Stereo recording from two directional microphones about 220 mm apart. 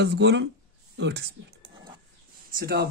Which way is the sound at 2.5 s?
40° right (ahead or behind).